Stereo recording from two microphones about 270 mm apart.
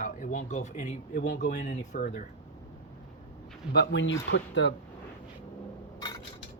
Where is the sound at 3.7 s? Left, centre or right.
Left.